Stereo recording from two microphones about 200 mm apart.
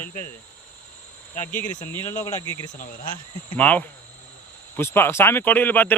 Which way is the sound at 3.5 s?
10° left (ahead or behind).